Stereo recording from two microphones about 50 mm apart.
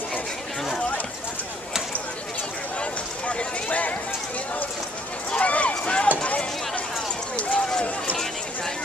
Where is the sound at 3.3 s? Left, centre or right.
Left.